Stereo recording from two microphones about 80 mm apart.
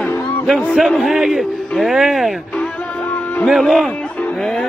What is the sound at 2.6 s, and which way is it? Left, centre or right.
Music, centre.